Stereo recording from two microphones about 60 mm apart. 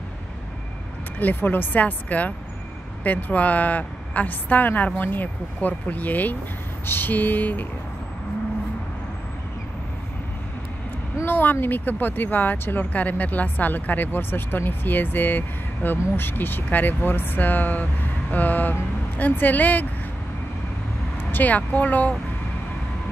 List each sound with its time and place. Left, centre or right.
1.2 s a woman's voice: left
11.2 s a sound: left
11.6 s a woman's voice: left
21.2 s speech: left